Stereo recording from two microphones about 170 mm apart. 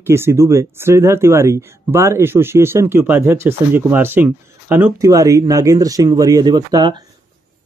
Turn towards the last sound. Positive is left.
turn(degrees=-25)  # may be behind; listen again after turning